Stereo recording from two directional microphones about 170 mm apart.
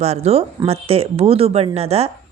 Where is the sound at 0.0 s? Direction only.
40° right (ahead or behind).